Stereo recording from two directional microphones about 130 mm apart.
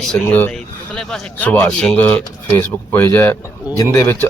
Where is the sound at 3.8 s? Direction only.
30° left (ahead or behind).